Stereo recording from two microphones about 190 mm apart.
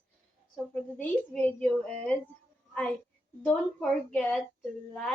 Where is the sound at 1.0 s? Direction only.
10° left (ahead or behind).